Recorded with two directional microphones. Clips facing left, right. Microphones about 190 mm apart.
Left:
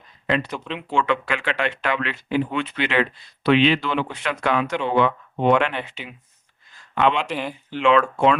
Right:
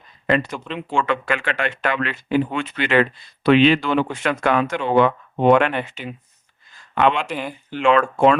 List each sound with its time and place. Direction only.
0.3 s speech: 45° right (ahead or behind)
0.5 s speech: centre (ahead or behind)
0.9 s speech: 45° right (ahead or behind)
7.3 s speech: centre (ahead or behind)
7.7 s speech: 45° right (ahead or behind)